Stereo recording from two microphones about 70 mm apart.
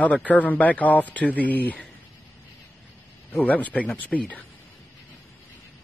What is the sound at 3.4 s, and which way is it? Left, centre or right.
Speech, left.